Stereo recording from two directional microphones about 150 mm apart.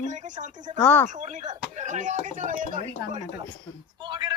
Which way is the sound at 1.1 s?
50° right (ahead or behind).